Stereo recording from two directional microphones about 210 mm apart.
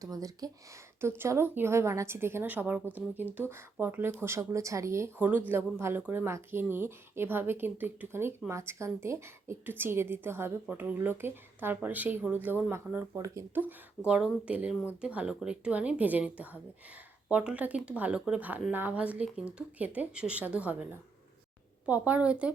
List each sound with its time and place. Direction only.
0.0 s a woman's voice: 15° right (ahead or behind)
21.8 s a woman's voice: 5° right (ahead or behind)